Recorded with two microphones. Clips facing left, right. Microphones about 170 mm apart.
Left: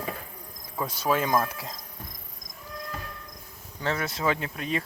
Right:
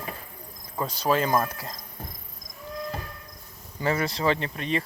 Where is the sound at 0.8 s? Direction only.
5° left (ahead or behind).